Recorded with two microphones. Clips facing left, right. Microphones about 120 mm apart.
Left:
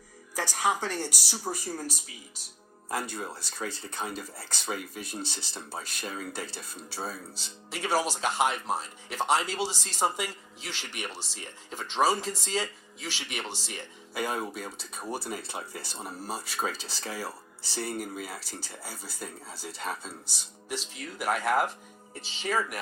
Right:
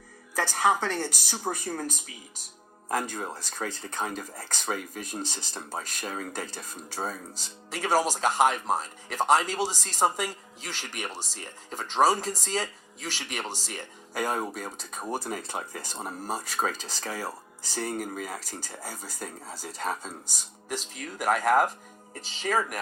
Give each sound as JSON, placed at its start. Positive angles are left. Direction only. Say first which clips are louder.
{"t": 0.3, "sound": "speech", "louder": "right 4 dB", "side_deg": -50}
{"t": 3.3, "sound": "speech", "louder": "right 2 dB", "side_deg": -45}